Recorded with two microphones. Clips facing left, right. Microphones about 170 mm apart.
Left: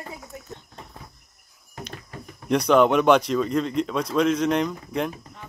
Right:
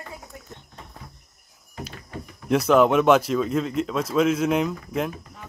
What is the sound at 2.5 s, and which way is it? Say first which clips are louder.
Speech: even; 5° right (ahead or behind).